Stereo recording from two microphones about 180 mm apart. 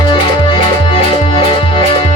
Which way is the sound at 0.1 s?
30° left (ahead or behind).